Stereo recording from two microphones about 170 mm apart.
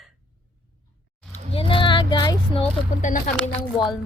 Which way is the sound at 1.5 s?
30° left (ahead or behind).